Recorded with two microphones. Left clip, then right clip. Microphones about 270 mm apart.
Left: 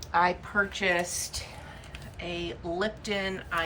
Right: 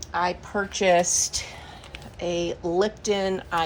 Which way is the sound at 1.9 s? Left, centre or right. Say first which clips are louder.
Right 9 dB; centre.